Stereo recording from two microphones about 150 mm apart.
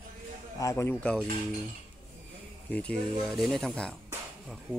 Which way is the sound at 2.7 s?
5° left (ahead or behind).